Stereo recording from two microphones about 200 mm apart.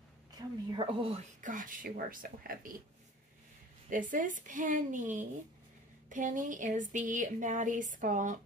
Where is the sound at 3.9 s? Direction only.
40° right (ahead or behind).